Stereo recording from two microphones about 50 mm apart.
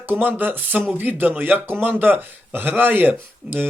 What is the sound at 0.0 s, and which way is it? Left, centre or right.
Speech, right.